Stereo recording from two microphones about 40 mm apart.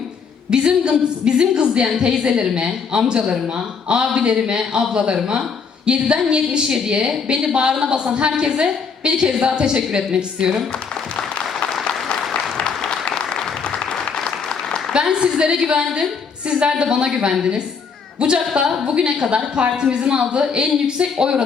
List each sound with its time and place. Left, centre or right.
0.5 s a woman's voice: right
12.3 s applause: left
14.9 s a woman's voice: right